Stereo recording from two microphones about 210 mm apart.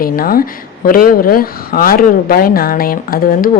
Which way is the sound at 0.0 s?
45° left (ahead or behind).